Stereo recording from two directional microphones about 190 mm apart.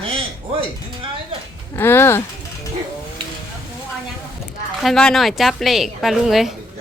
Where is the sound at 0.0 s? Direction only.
30° right (ahead or behind).